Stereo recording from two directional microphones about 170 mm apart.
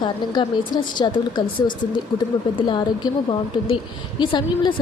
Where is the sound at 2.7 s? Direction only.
30° left (ahead or behind).